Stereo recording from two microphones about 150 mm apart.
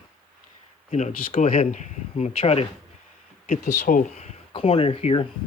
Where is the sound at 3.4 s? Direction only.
60° left (ahead or behind); by 5.2 s 40° left (ahead or behind).